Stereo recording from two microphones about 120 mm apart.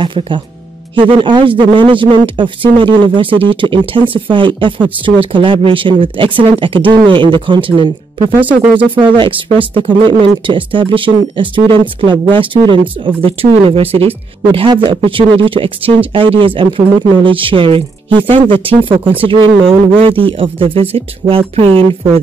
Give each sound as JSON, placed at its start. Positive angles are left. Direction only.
{"t": 0.0, "sound": "speech", "side_deg": -45}
{"t": 8.4, "sound": "speech", "side_deg": -15}
{"t": 9.1, "sound": "speech", "side_deg": -45}
{"t": 14.7, "sound": "speech", "side_deg": -40}